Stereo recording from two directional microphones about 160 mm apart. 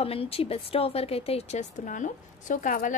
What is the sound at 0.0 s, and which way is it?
Speech, 35° left (ahead or behind).